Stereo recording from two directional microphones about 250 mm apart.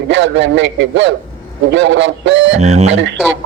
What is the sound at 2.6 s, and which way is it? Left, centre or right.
Speech, right.